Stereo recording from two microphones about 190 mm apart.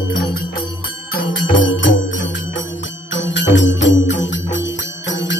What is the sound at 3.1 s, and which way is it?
Music, 75° left (ahead or behind).